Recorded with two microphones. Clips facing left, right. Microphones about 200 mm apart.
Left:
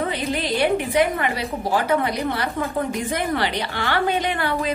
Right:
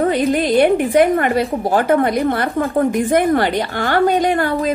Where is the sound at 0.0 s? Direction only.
45° right (ahead or behind).